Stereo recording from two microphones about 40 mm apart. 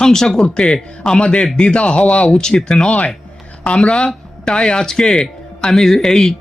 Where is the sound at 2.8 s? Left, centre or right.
Left; by 6.3 s centre.